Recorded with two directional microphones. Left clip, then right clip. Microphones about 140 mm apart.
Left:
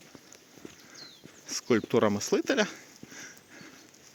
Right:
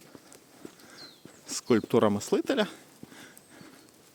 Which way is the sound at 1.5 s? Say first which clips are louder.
Right 1 dB; 30° right (ahead or behind).